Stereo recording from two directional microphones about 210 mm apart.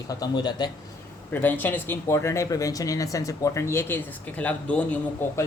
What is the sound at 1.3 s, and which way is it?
Speech, 10° left (ahead or behind).